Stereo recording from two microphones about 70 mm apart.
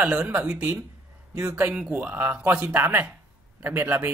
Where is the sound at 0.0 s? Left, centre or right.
Right.